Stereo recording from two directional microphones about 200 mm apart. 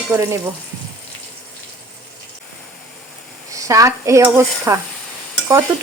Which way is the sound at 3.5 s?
15° right (ahead or behind).